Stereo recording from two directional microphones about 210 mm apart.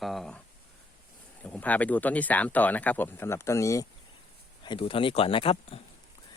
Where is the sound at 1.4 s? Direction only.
5° left (ahead or behind); by 5.8 s 25° left (ahead or behind).